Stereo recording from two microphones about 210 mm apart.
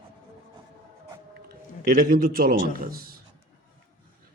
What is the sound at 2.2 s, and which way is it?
Speech, 45° right (ahead or behind).